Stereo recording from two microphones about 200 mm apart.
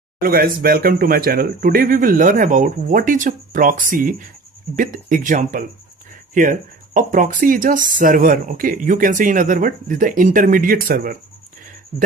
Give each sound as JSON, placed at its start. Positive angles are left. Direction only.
{"t": 0.2, "sound": "speech", "side_deg": -45}